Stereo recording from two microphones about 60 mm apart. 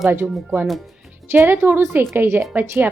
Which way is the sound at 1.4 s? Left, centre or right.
Right.